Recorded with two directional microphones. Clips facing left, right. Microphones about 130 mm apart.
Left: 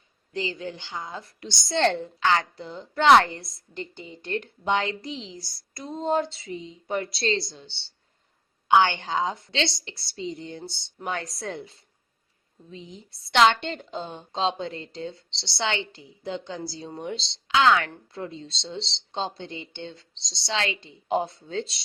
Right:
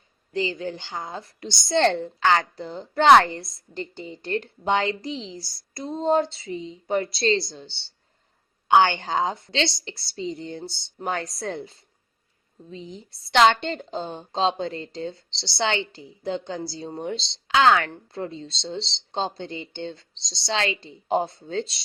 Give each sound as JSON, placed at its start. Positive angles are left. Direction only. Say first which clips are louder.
{"t": 0.3, "sound": "speech", "louder": "right 4 dB", "side_deg": -35}
{"t": 12.7, "sound": "speech", "louder": "right 4 dB", "side_deg": -35}